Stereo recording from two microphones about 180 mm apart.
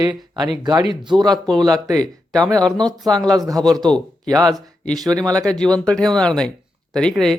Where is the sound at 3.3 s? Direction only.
20° right (ahead or behind).